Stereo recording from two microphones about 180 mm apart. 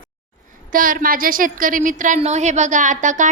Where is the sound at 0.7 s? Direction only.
50° right (ahead or behind).